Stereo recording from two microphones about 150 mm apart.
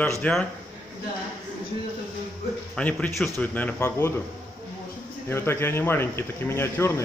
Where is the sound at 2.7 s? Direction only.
10° left (ahead or behind).